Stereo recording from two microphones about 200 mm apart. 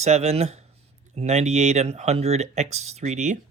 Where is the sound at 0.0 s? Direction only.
35° right (ahead or behind).